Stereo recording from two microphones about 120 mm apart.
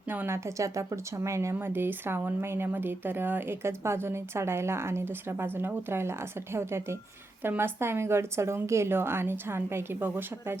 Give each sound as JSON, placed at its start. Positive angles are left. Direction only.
{"t": 0.1, "sound": "a woman's voice", "side_deg": -20}